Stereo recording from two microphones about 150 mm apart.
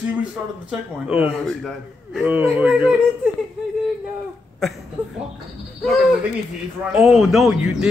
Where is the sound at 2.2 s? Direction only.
10° right (ahead or behind).